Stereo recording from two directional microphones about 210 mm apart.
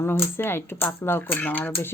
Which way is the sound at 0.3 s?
10° left (ahead or behind).